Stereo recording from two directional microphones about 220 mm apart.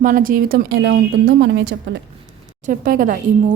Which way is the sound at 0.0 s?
40° right (ahead or behind).